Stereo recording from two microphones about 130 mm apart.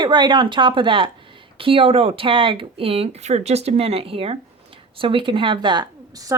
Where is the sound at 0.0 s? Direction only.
35° right (ahead or behind).